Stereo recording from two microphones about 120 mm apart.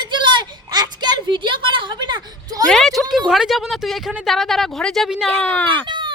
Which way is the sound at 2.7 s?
Centre (ahead or behind).